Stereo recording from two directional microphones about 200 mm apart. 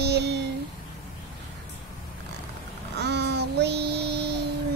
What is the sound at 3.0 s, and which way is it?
Child singing, 55° right (ahead or behind).